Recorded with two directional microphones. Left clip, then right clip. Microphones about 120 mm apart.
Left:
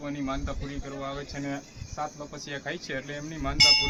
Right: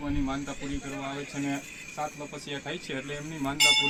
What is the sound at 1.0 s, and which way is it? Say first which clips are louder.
Speech: even; 50° left (ahead or behind).